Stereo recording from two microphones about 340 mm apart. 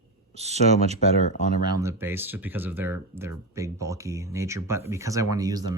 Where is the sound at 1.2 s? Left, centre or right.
Left.